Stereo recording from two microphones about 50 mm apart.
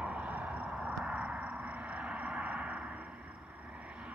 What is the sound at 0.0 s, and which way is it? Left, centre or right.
Vehicle, right.